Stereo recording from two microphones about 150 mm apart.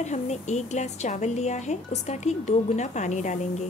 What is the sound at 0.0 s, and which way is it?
A woman's voice, 50° left (ahead or behind).